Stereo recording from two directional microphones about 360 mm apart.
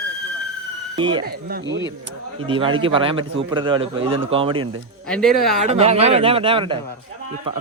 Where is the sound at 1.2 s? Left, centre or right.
Right.